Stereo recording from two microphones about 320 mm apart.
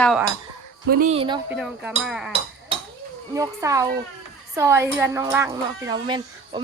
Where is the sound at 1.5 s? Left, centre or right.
Centre.